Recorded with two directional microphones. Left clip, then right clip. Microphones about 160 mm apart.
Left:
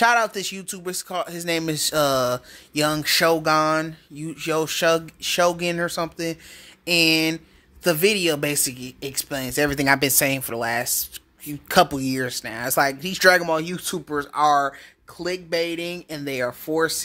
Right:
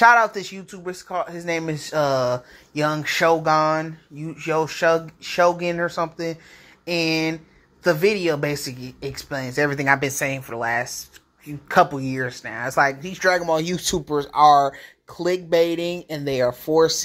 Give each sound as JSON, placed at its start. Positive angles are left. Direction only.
{"t": 0.0, "sound": "speech", "side_deg": 30}
{"t": 7.8, "sound": "speech", "side_deg": 35}
{"t": 9.7, "sound": "speech", "side_deg": 40}
{"t": 13.5, "sound": "speech", "side_deg": 0}